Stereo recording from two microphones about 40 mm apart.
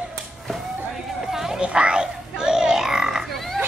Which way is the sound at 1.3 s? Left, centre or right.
Centre.